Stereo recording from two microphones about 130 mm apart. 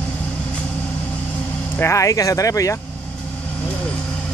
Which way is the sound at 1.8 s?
25° left (ahead or behind).